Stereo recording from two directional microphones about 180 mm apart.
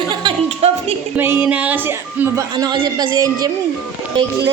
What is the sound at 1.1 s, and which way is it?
Speech, 10° right (ahead or behind).